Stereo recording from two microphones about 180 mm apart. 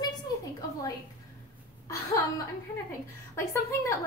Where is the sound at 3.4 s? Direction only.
15° left (ahead or behind).